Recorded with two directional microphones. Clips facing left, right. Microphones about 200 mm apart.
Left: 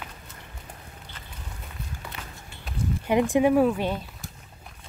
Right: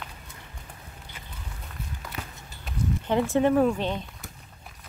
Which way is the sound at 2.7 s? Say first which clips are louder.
Even; centre (ahead or behind).